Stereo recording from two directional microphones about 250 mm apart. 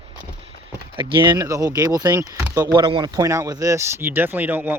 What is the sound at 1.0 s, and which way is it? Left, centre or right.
Speech, centre.